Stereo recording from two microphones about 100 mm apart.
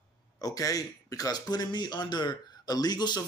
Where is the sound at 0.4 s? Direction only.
35° left (ahead or behind).